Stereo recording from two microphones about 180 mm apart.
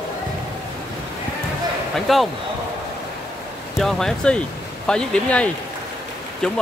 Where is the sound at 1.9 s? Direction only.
Centre (ahead or behind).